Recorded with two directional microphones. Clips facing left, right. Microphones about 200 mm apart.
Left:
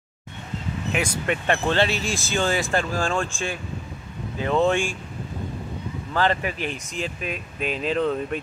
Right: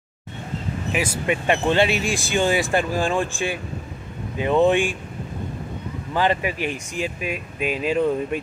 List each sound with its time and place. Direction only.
0.9 s speech: 5° right (ahead or behind)
6.1 s speech: 15° right (ahead or behind)